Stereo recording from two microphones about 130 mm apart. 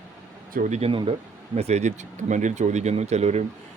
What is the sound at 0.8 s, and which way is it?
Speech, 45° right (ahead or behind).